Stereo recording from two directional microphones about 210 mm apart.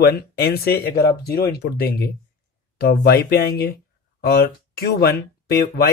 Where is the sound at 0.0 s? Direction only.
50° left (ahead or behind).